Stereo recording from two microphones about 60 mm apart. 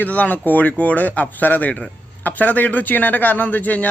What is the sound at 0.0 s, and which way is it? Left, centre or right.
A man's voice, left.